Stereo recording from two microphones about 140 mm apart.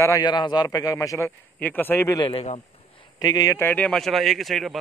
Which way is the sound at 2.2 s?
45° left (ahead or behind).